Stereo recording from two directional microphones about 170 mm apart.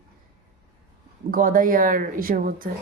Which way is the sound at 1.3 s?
55° right (ahead or behind).